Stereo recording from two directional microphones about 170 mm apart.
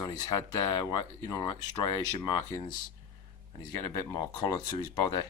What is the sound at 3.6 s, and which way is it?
Speech, 25° left (ahead or behind).